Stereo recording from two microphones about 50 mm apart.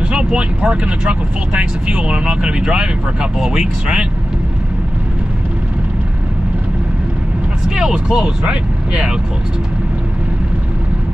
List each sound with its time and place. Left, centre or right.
0.1 s speech: right
7.6 s speech: centre